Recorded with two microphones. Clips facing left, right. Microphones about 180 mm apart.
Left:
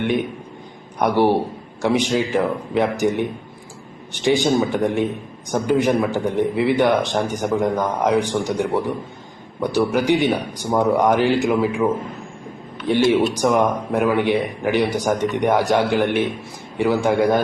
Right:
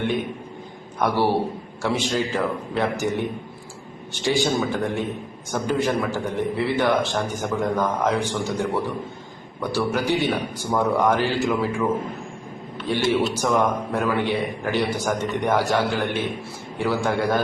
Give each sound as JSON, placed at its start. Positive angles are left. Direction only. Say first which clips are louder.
{"t": 0.9, "sound": "a man's voice", "louder": "left 4 dB", "side_deg": 15}
{"t": 12.9, "sound": "a man's voice", "louder": "left 5 dB", "side_deg": 15}